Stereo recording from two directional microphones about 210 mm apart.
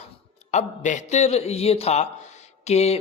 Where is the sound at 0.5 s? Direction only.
35° left (ahead or behind).